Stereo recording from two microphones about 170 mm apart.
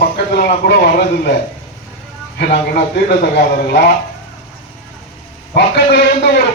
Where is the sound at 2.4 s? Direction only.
85° left.